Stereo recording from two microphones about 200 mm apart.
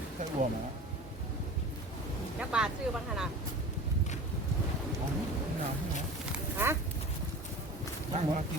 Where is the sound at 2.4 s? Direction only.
5° right (ahead or behind).